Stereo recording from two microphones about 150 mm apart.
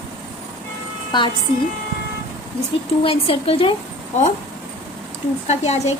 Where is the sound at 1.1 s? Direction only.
30° left (ahead or behind).